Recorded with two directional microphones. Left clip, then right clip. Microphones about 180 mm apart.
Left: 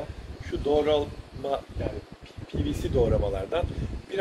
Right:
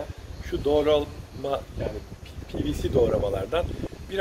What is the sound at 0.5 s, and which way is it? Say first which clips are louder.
Speech: right 2 dB; 5° right (ahead or behind).